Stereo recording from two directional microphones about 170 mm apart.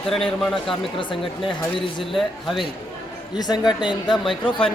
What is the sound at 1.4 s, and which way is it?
Speech, 30° left (ahead or behind).